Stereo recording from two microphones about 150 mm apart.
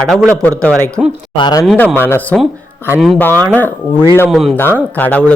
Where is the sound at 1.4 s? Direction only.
30° left (ahead or behind).